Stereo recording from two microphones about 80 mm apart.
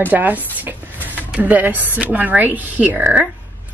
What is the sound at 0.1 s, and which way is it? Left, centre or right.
Speech, right.